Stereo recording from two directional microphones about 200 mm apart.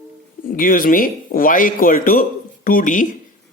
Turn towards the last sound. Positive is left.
turn(degrees=40)  # may be behind; listen again after turning